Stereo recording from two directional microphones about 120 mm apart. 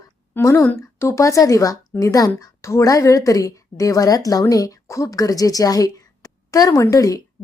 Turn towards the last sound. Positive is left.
turn(degrees=30)  # may be behind; listen again after turning